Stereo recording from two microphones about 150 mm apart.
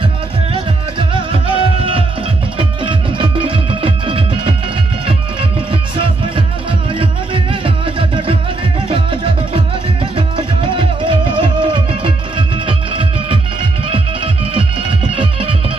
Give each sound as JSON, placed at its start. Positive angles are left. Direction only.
{"t": 0.5, "sound": "music", "side_deg": -35}
{"t": 6.0, "sound": "music", "side_deg": -35}